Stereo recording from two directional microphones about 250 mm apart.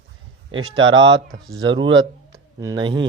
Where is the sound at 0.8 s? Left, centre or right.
Right.